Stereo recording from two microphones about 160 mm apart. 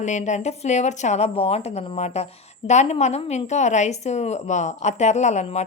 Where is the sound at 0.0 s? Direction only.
50° left (ahead or behind).